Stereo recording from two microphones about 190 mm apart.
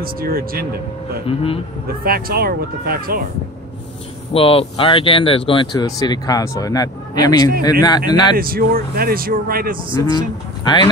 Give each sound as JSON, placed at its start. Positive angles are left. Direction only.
{"t": 0.0, "sound": "speech", "side_deg": -50}
{"t": 1.2, "sound": "speech", "side_deg": 30}
{"t": 1.9, "sound": "speech", "side_deg": -50}
{"t": 4.3, "sound": "speech", "side_deg": 30}
{"t": 8.4, "sound": "speech", "side_deg": -50}
{"t": 10.1, "sound": "speech", "side_deg": 25}